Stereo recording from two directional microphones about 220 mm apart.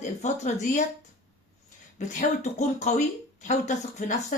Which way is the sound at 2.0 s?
35° left (ahead or behind).